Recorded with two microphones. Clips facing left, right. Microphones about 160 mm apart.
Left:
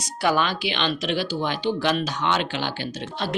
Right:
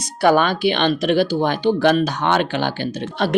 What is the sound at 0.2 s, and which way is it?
A woman's voice, 55° right (ahead or behind).